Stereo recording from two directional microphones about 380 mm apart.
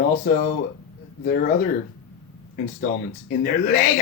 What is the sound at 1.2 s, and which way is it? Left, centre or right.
Speech, left.